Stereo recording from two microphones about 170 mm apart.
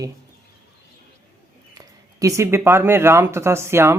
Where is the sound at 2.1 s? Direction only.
20° right (ahead or behind).